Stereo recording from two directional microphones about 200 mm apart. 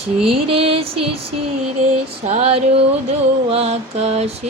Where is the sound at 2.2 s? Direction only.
30° right (ahead or behind).